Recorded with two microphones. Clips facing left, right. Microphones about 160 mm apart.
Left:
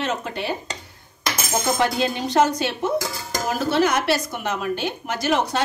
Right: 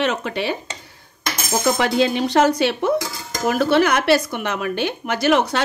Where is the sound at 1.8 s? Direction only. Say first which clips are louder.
Right 4 dB; 85° right; by 5.4 s 70° right (ahead or behind).